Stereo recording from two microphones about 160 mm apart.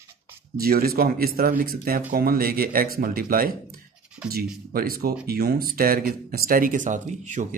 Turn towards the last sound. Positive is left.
turn(degrees=-50)  # may be behind; listen again after turning